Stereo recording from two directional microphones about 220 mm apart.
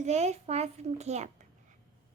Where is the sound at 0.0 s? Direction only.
30° right (ahead or behind).